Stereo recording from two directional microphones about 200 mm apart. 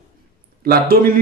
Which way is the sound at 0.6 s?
50° right (ahead or behind).